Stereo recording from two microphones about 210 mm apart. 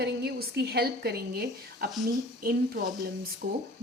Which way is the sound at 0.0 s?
50° right (ahead or behind).